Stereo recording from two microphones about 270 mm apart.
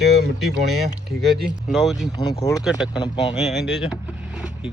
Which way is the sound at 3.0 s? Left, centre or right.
Centre.